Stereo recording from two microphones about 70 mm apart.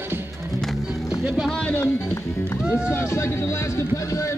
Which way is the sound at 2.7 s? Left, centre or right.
Centre.